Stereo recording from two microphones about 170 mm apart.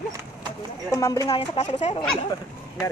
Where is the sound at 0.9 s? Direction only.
20° left (ahead or behind).